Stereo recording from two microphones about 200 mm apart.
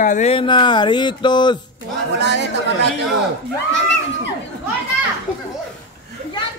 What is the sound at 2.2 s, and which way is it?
Speech, 60° right (ahead or behind).